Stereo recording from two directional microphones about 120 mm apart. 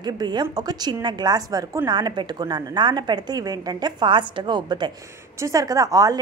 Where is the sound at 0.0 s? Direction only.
35° right (ahead or behind).